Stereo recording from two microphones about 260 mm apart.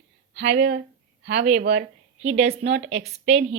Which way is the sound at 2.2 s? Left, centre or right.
Right.